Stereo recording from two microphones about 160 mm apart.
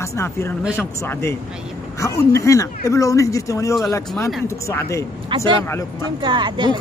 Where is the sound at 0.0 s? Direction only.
15° left (ahead or behind).